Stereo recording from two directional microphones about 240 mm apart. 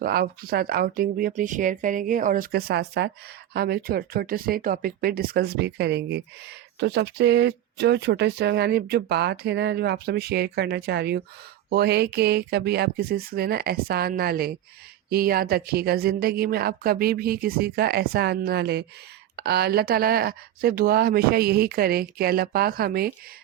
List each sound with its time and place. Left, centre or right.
0.0 s speech: right